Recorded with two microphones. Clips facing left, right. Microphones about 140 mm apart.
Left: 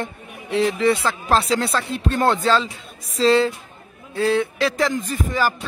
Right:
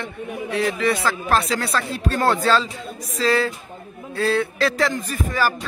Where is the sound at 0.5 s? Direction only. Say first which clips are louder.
Left 3 dB; 25° left (ahead or behind).